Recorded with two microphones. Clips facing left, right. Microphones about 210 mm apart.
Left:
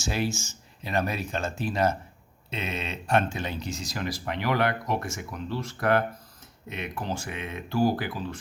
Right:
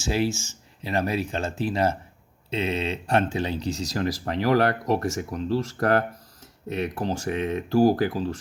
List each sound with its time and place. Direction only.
0.1 s speech: 30° right (ahead or behind)